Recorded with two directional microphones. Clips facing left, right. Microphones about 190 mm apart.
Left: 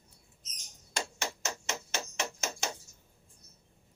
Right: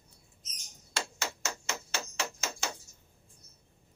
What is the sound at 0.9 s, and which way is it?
Hammer, 20° left (ahead or behind).